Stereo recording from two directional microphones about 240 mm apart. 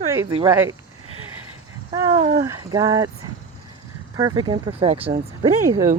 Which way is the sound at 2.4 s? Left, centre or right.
Centre.